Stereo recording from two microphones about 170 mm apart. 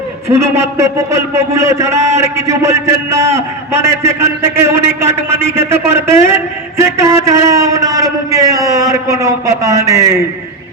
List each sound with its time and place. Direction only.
0.3 s a man's voice: 15° right (ahead or behind)